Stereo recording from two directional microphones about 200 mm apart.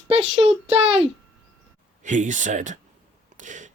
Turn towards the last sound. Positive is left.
turn(degrees=-40)  # may be behind; listen again after turning